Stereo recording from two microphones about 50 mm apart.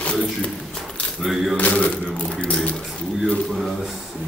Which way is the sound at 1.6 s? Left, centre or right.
Left.